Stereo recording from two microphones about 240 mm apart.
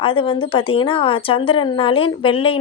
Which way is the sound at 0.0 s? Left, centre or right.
Left.